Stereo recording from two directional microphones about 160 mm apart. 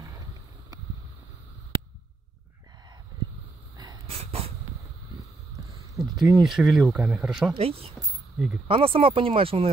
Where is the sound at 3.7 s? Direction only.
25° right (ahead or behind).